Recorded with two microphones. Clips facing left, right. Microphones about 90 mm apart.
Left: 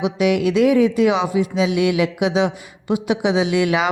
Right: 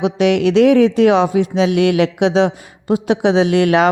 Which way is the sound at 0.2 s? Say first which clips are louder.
Right 4 dB; 65° right (ahead or behind).